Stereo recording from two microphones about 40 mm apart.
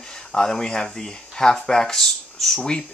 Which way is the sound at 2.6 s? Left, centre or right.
Left.